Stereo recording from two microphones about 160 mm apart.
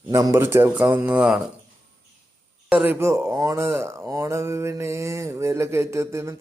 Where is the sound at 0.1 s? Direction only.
20° right (ahead or behind).